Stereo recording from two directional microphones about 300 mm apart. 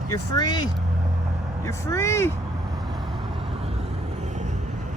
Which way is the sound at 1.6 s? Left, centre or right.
Centre.